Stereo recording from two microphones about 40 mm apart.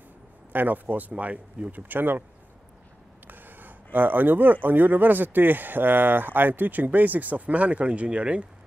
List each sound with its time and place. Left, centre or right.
0.5 s speech: right
3.3 s a sound: right
4.6 s speech: right